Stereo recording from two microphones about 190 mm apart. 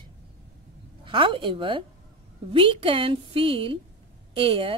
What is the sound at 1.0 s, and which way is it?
A woman's voice, 25° right (ahead or behind).